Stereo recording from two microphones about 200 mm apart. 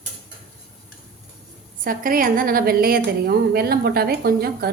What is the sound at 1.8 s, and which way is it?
A woman's voice, 45° right (ahead or behind).